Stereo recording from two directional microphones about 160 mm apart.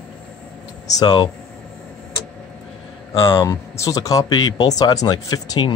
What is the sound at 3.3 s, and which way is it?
Speech, 20° left (ahead or behind).